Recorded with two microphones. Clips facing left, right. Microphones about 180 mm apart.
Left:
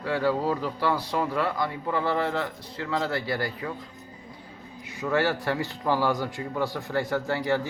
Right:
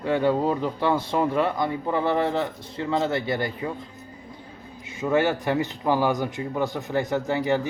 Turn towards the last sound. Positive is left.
turn(degrees=-20)  # may be behind; listen again after turning